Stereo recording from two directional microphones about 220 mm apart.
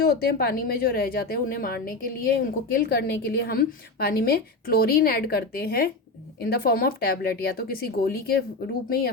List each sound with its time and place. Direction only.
0.0 s a woman's voice: 45° left (ahead or behind)